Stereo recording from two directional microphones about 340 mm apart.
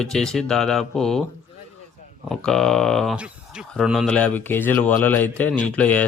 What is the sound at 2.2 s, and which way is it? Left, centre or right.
Speech, centre.